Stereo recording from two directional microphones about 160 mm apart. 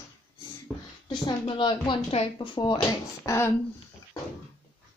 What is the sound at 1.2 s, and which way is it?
Speech, 30° left (ahead or behind).